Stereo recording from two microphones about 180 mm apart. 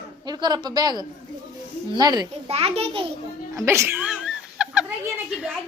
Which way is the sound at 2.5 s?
35° right (ahead or behind).